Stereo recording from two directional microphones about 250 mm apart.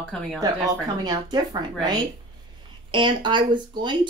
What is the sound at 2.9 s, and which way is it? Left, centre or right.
Speech, centre.